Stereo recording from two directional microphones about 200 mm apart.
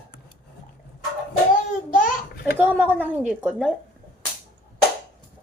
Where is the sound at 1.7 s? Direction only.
40° left (ahead or behind).